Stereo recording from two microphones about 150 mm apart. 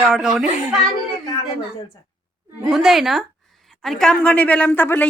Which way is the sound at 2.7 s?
Centre (ahead or behind).